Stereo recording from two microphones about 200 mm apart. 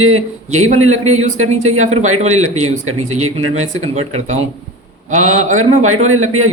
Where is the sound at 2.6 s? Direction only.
90° right.